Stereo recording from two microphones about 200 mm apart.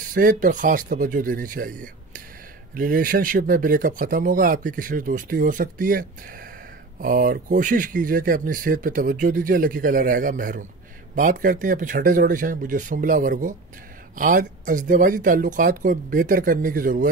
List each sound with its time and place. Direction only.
0.1 s speech: 45° right (ahead or behind)